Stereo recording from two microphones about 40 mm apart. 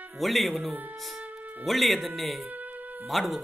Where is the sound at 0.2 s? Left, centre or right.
Centre.